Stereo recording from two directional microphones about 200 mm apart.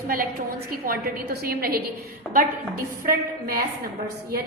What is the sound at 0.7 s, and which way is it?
A woman's voice, 50° right (ahead or behind).